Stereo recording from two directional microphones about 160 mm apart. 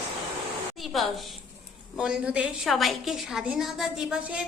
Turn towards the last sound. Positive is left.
turn(degrees=0)  # may be behind; listen again after turning